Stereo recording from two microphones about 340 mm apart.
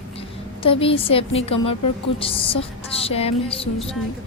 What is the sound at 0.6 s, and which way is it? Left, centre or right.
Music, centre.